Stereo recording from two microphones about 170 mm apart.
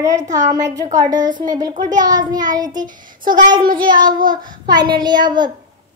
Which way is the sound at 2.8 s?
50° right (ahead or behind).